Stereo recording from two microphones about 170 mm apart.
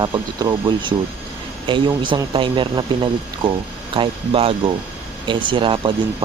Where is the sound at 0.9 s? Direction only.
20° right (ahead or behind).